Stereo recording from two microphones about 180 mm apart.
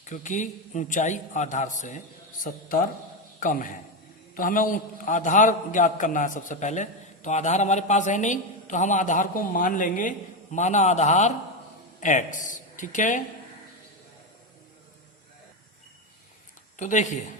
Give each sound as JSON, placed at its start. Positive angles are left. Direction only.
{"t": 0.0, "sound": "a man's voice", "side_deg": 45}
{"t": 16.7, "sound": "a man's voice", "side_deg": 40}